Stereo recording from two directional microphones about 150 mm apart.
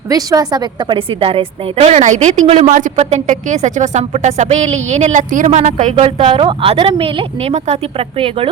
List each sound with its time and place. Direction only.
0.1 s a woman's voice: 25° right (ahead or behind); by 8.4 s 40° right (ahead or behind)